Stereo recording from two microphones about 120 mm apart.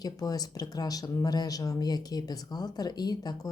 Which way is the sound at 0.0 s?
30° left (ahead or behind).